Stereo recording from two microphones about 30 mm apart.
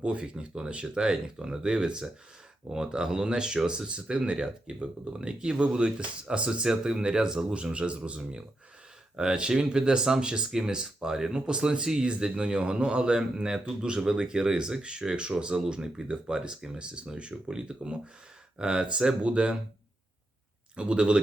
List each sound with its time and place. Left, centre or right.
0.0 s speech: right
7.5 s speech: right
9.1 s speech: right
20.7 s speech: right